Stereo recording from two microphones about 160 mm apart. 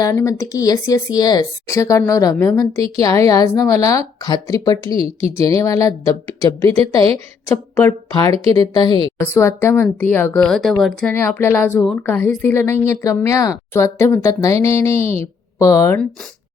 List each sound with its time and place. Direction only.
0.0 s a woman's voice: 20° left (ahead or behind)
10.4 s speech: centre (ahead or behind)
11.3 s a woman's voice: 15° left (ahead or behind)